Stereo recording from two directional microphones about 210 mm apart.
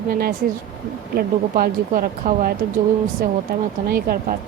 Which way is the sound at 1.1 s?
45° right (ahead or behind).